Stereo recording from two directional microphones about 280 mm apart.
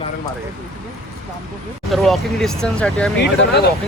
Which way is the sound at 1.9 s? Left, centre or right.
Centre.